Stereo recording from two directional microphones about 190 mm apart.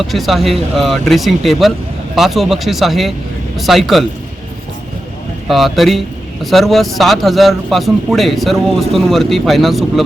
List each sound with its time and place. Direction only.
0.0 s a man's voice: centre (ahead or behind)
5.5 s a man's voice: centre (ahead or behind)